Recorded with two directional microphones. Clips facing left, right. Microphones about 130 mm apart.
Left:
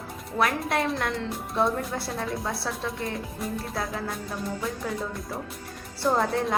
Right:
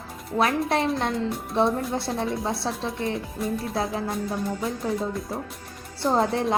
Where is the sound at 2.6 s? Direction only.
25° right (ahead or behind).